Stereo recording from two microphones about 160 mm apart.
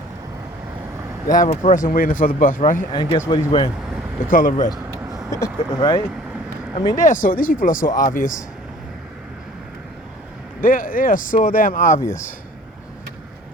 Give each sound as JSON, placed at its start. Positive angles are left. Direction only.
{"t": 1.5, "sound": "speech", "side_deg": 50}
{"t": 2.9, "sound": "speech", "side_deg": 30}
{"t": 4.3, "sound": "speech", "side_deg": 60}
{"t": 4.9, "sound": "vehicle", "side_deg": -20}
{"t": 5.3, "sound": "speech", "side_deg": 20}
{"t": 7.1, "sound": "speech", "side_deg": 55}
{"t": 10.6, "sound": "speech", "side_deg": 60}
{"t": 11.9, "sound": "speech", "side_deg": 15}